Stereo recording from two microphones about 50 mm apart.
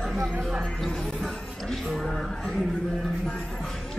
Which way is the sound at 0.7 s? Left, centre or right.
Centre.